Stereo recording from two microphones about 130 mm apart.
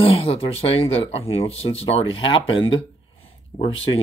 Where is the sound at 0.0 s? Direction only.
45° left (ahead or behind).